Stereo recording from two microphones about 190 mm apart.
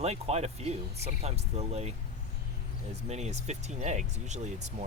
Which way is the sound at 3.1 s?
35° right (ahead or behind).